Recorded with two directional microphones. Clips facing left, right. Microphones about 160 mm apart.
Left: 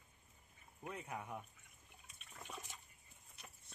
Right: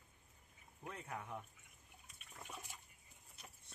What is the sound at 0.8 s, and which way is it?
Speech, 15° left (ahead or behind).